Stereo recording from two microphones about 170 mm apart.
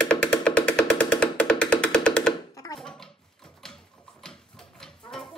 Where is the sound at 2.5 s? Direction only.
20° left (ahead or behind).